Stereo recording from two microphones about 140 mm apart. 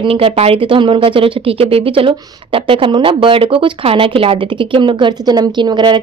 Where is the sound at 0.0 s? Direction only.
45° right (ahead or behind).